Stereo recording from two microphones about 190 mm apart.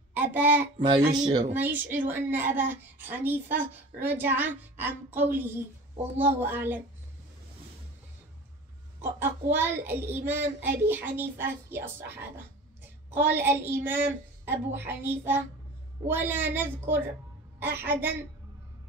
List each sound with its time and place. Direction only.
0.1 s a child's voice: 10° right (ahead or behind)
0.8 s speech: 25° right (ahead or behind)
1.5 s speech: 10° right (ahead or behind)
9.0 s speech: 10° right (ahead or behind)